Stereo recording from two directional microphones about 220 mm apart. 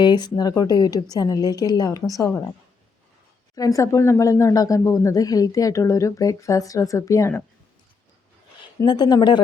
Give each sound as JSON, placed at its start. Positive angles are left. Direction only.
{"t": 0.0, "sound": "speech", "side_deg": 20}
{"t": 3.5, "sound": "speech", "side_deg": 15}
{"t": 8.6, "sound": "speech", "side_deg": 20}